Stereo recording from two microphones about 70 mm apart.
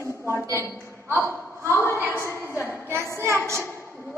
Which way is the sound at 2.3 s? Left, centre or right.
Left.